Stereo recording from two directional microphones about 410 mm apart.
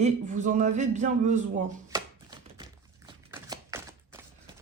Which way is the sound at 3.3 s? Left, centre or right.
Centre.